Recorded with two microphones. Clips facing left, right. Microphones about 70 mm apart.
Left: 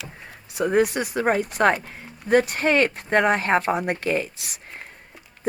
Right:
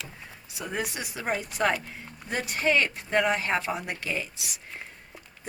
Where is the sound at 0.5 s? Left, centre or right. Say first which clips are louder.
Left 13 dB; left.